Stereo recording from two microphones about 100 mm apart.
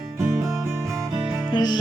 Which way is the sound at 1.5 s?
45° left (ahead or behind).